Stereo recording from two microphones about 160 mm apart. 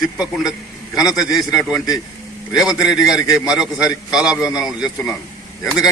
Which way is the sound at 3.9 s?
25° left (ahead or behind).